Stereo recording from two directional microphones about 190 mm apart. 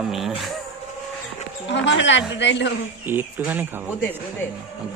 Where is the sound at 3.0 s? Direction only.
10° right (ahead or behind).